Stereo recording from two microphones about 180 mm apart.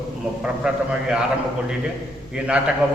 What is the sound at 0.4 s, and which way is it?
Speech, 5° right (ahead or behind).